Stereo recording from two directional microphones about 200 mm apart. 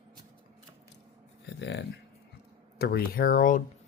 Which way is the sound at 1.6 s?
55° left (ahead or behind).